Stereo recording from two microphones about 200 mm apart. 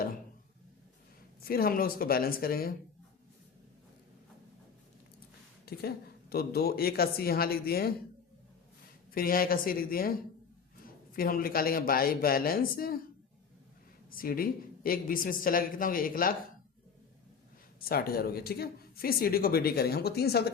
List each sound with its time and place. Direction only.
1.4 s speech: 50° left (ahead or behind)
5.6 s speech: 50° left (ahead or behind)
9.1 s speech: 45° left (ahead or behind)
14.2 s speech: 45° left (ahead or behind)
17.7 s speech: 50° left (ahead or behind)